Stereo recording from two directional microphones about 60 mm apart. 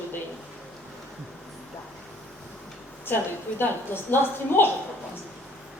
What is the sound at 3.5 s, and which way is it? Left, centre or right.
A woman's voice, left.